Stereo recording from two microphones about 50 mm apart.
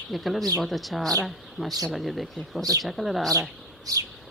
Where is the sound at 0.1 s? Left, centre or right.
Centre.